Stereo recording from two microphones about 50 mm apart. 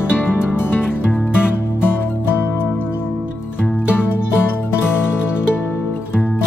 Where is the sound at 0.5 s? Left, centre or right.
Left.